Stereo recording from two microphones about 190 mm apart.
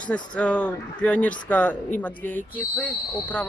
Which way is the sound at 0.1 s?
5° left (ahead or behind).